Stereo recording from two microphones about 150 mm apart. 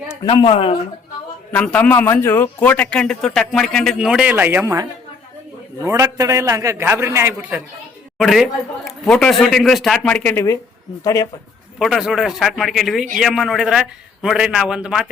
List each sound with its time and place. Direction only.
0.3 s speech: 35° left (ahead or behind)
1.5 s a man's voice: 10° left (ahead or behind); by 7.6 s 15° right (ahead or behind)
8.2 s speech: centre (ahead or behind); by 11.3 s 25° left (ahead or behind)
11.8 s speech: centre (ahead or behind)